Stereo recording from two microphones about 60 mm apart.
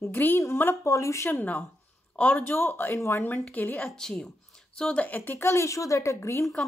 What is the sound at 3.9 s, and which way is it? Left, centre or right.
Speech, centre.